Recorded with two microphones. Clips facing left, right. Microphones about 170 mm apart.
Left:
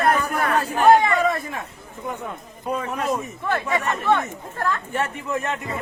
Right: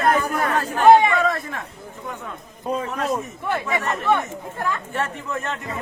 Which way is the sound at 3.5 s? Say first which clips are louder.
Left 1 dB; 15° right (ahead or behind).